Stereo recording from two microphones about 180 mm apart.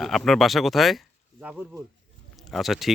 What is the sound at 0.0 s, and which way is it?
Speech, centre (ahead or behind).